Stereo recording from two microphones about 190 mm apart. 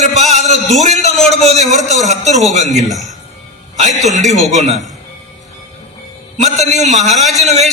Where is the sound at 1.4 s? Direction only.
40° right (ahead or behind).